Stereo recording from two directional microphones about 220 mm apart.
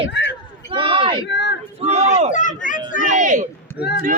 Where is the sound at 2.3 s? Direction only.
35° left (ahead or behind).